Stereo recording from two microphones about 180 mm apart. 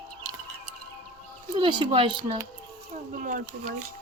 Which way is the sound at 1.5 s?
25° right (ahead or behind).